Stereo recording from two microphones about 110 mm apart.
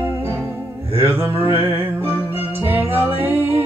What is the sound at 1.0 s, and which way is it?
Mantra, 20° right (ahead or behind).